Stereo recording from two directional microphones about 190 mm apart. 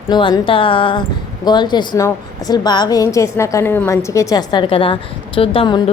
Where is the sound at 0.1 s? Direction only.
25° left (ahead or behind).